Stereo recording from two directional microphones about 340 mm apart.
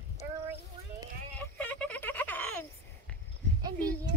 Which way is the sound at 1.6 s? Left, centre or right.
Centre.